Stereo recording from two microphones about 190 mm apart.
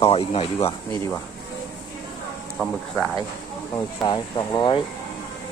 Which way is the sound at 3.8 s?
20° left (ahead or behind).